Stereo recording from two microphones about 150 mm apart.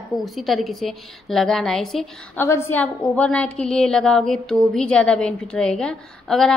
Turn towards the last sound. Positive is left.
turn(degrees=5)  # may be behind; listen again after turning